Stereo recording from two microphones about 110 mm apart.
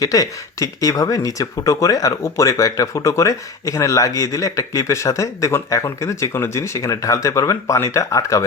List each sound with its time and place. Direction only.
0.0 s speech: 30° left (ahead or behind)